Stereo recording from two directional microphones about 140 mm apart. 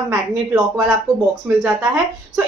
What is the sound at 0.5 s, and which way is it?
Speech, 5° right (ahead or behind).